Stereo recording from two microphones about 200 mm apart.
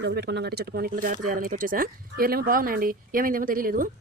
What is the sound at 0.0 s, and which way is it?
Speech, 55° right (ahead or behind).